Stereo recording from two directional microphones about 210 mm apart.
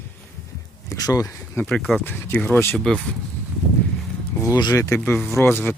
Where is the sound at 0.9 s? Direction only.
15° left (ahead or behind).